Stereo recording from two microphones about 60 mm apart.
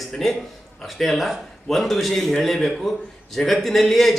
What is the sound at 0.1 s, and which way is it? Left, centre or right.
A man's voice, centre.